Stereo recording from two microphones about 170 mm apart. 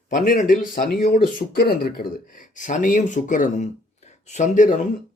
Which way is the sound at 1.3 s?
65° left (ahead or behind).